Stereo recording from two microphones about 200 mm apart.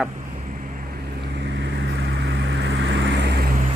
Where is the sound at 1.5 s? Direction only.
60° right (ahead or behind).